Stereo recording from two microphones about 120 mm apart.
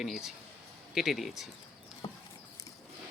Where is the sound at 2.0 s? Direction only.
45° left (ahead or behind).